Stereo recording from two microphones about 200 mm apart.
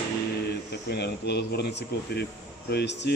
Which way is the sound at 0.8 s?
55° left (ahead or behind).